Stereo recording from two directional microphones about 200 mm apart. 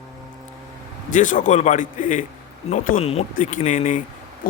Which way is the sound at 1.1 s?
40° left (ahead or behind).